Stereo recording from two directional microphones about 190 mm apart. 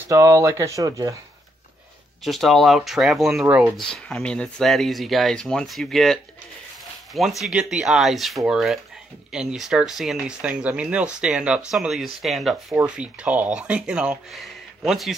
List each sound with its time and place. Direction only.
0.1 s speech: 15° right (ahead or behind)
2.2 s speech: centre (ahead or behind)
7.2 s speech: centre (ahead or behind)